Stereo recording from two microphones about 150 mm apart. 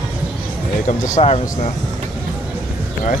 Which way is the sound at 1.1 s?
45° left (ahead or behind).